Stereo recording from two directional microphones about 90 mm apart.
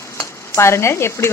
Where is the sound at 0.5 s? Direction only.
30° left (ahead or behind).